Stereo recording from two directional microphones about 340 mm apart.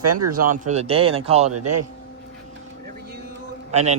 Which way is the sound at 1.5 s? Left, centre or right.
Right.